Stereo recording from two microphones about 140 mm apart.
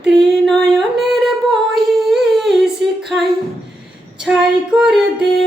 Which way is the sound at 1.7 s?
Centre (ahead or behind).